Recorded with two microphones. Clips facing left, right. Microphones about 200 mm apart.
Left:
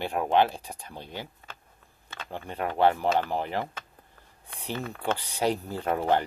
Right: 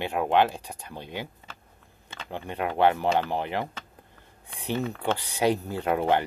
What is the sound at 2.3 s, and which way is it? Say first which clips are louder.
Speech: right 2 dB; 15° right (ahead or behind).